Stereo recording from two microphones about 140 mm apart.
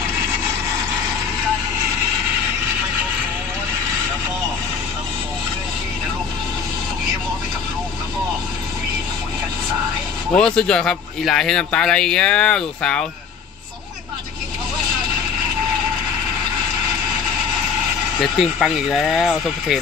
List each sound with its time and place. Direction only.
10.3 s speech: 5° left (ahead or behind)
18.2 s speech: centre (ahead or behind)